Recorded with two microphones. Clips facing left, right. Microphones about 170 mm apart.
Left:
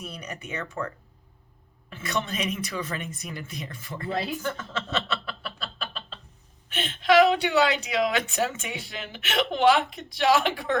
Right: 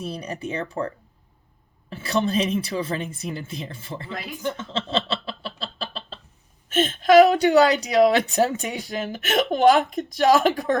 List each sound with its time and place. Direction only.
0.0 s a woman's voice: 30° right (ahead or behind)
1.9 s speech: 35° right (ahead or behind)
4.4 s a sound: 25° right (ahead or behind)
6.7 s a woman's voice: 45° right (ahead or behind)